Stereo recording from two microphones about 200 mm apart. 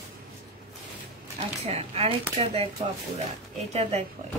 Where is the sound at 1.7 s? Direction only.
30° right (ahead or behind).